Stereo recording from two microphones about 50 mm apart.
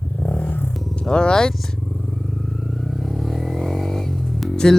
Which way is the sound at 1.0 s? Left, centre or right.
Centre.